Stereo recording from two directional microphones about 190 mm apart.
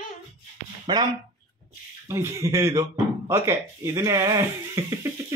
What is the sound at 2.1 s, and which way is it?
Speech, 15° right (ahead or behind).